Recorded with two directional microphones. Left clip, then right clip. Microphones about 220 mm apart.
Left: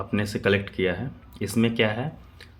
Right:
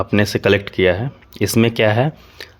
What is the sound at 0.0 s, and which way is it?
Speech, 45° right (ahead or behind).